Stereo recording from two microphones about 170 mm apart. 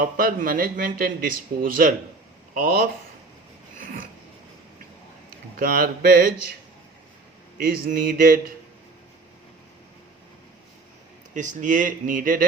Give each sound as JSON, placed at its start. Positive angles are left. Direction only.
{"t": 0.0, "sound": "a man's voice", "side_deg": -55}
{"t": 5.5, "sound": "a man's voice", "side_deg": -60}
{"t": 7.6, "sound": "a man's voice", "side_deg": -60}
{"t": 11.3, "sound": "speech", "side_deg": -45}